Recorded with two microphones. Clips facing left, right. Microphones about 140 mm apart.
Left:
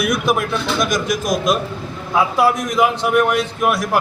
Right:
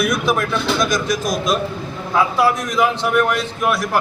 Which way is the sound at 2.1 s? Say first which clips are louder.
Left 1 dB; 5° left (ahead or behind).